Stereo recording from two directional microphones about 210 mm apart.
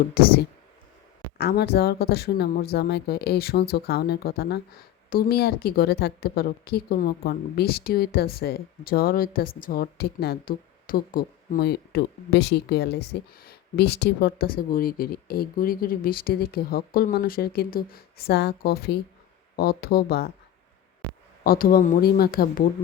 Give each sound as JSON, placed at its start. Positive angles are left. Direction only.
{"t": 0.2, "sound": "speech", "side_deg": 45}
{"t": 1.4, "sound": "speech", "side_deg": 50}
{"t": 21.4, "sound": "speech", "side_deg": 45}